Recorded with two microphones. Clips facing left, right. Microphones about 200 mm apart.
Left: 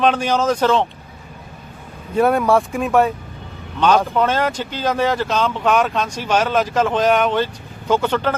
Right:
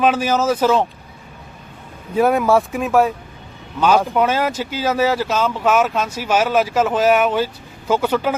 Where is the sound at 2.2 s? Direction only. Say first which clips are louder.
Even; centre (ahead or behind).